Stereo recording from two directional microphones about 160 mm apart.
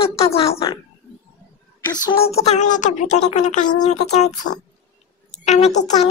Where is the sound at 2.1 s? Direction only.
40° left (ahead or behind).